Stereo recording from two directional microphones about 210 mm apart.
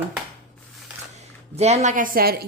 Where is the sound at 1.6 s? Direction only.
35° right (ahead or behind).